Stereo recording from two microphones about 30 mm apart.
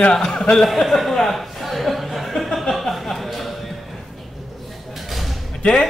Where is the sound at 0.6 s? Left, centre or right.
Centre.